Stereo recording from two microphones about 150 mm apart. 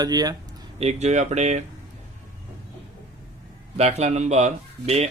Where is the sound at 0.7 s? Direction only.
45° right (ahead or behind).